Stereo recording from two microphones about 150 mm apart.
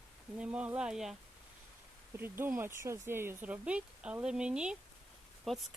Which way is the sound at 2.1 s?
15° right (ahead or behind).